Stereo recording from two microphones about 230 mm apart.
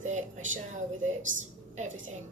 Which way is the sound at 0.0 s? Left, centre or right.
Right.